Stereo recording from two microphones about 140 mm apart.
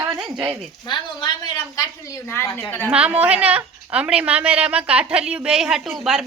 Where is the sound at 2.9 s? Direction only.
10° right (ahead or behind).